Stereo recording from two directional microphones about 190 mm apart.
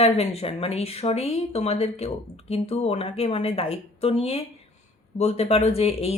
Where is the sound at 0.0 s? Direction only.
30° left (ahead or behind).